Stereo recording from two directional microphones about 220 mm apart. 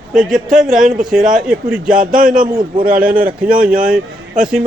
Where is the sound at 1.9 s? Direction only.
40° right (ahead or behind).